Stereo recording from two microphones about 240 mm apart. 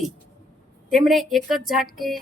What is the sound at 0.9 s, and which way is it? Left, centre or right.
A woman's voice, centre.